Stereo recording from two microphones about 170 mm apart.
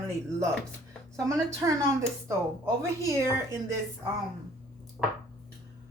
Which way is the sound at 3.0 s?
15° right (ahead or behind).